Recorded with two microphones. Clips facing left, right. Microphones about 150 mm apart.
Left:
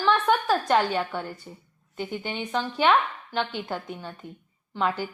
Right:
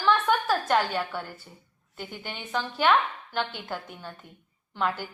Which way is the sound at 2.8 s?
Centre (ahead or behind).